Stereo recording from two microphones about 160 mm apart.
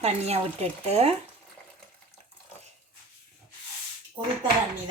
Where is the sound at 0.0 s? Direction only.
40° right (ahead or behind).